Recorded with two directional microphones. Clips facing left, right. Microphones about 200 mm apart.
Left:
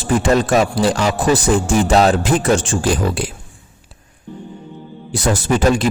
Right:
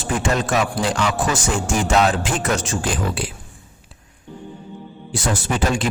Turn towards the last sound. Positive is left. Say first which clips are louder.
# left 6 dB
turn(degrees=40)  # may be behind; listen again after turning